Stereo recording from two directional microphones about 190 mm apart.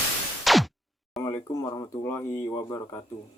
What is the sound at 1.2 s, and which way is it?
Speech, 15° left (ahead or behind).